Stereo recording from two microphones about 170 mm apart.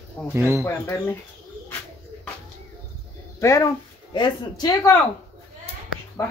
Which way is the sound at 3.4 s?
15° left (ahead or behind).